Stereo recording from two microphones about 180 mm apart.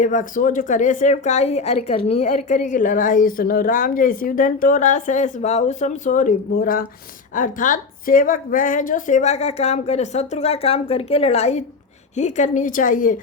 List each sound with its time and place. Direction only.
0.0 s a woman's voice: 45° left (ahead or behind)